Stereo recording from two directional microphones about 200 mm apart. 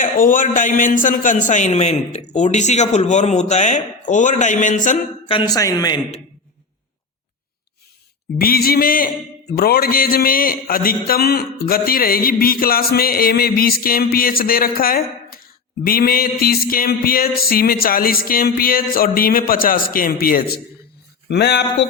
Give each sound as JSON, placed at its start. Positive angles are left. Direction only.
{"t": 0.0, "sound": "a man's voice", "side_deg": 40}
{"t": 5.2, "sound": "a woman's voice", "side_deg": 20}
{"t": 8.4, "sound": "a man's voice", "side_deg": 50}
{"t": 21.2, "sound": "a sound", "side_deg": 55}